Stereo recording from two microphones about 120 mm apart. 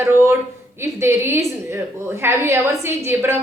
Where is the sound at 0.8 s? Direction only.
20° right (ahead or behind).